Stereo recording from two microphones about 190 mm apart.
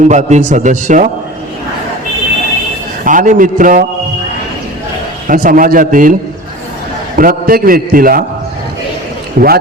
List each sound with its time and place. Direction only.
0.1 s a man's voice: 40° right (ahead or behind)
3.0 s a man's voice: 45° right (ahead or behind)
5.3 s a man's voice: 45° right (ahead or behind)
7.2 s a man's voice: 50° right (ahead or behind)
9.4 s a man's voice: 50° right (ahead or behind)